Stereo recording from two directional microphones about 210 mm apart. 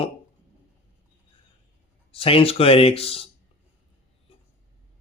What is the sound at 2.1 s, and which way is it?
Speech, 25° left (ahead or behind).